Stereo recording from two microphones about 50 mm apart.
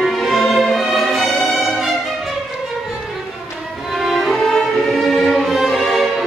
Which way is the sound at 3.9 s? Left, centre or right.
Centre.